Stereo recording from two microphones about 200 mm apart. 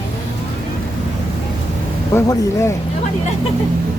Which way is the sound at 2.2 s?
15° left (ahead or behind).